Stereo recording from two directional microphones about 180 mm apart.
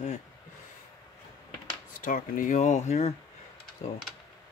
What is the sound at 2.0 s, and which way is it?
Speech, 50° left (ahead or behind).